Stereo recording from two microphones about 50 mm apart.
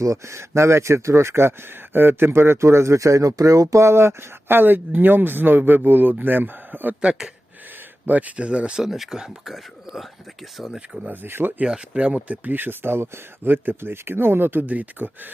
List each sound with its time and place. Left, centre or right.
0.0 s speech: right
7.0 s speech: centre
8.0 s speech: right
8.4 s speech: right
8.8 s speech: centre
10.8 s speech: centre
11.1 s speech: right
11.6 s speech: right
12.5 s speech: right